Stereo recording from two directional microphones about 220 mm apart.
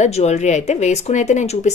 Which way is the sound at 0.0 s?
30° left (ahead or behind).